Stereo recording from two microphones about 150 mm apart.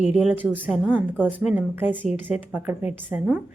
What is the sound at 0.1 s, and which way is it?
A woman's voice, 10° right (ahead or behind).